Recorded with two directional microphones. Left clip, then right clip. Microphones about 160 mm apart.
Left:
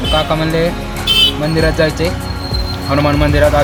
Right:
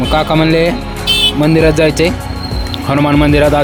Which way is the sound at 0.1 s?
50° right (ahead or behind).